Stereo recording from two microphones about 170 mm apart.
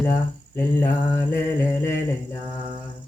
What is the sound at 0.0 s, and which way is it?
Cricket, 15° left (ahead or behind).